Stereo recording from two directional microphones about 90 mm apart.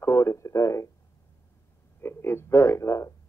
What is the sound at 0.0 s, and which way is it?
Speech, 30° left (ahead or behind).